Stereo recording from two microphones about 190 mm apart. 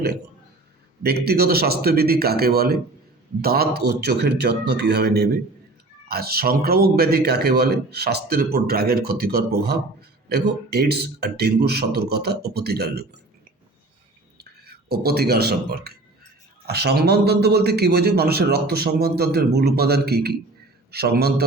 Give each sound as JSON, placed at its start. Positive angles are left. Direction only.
{"t": 1.0, "sound": "a man's voice", "side_deg": -55}
{"t": 14.3, "sound": "a man's voice", "side_deg": -55}